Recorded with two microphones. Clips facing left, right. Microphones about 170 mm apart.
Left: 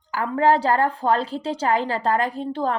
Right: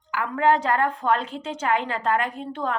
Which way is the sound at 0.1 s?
35° left (ahead or behind).